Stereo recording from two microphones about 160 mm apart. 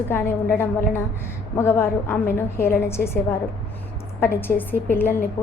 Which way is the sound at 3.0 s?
70° left (ahead or behind).